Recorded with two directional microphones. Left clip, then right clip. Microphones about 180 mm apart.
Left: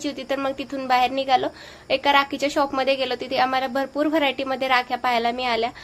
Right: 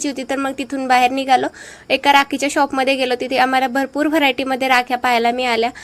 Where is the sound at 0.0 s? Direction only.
30° right (ahead or behind).